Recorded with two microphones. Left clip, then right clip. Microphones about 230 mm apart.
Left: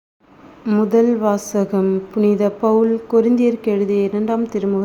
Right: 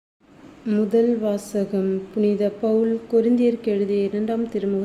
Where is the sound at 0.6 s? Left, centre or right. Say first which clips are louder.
Left 4 dB; centre.